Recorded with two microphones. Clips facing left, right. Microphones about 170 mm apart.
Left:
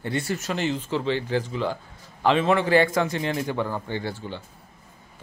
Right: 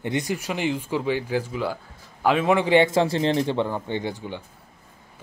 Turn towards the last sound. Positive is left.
turn(degrees=-15)  # may be behind; listen again after turning